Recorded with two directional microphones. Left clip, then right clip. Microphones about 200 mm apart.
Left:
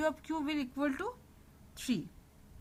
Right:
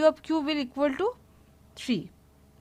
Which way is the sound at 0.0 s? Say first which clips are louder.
Right 11 dB; 40° right (ahead or behind).